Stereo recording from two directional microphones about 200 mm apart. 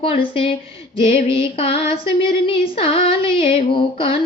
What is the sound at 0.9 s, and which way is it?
Female singing, 25° left (ahead or behind).